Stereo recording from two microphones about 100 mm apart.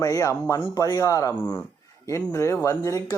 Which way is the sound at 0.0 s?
35° left (ahead or behind).